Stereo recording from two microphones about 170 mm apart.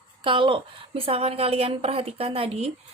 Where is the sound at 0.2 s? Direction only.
30° right (ahead or behind).